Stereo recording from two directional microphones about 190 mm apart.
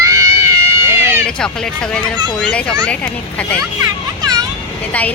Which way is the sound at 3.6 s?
20° right (ahead or behind).